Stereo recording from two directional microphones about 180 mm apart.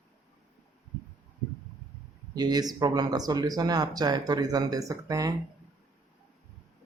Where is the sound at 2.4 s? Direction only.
20° right (ahead or behind).